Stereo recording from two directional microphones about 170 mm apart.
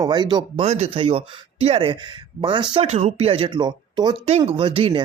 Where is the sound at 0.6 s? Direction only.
40° right (ahead or behind).